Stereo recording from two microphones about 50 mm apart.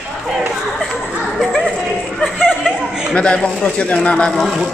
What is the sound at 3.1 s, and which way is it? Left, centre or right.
Speech, left.